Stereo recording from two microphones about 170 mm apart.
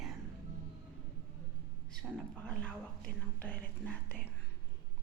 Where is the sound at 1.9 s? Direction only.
5° left (ahead or behind).